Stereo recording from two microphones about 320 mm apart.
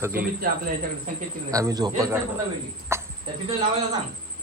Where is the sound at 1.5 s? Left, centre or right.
Centre.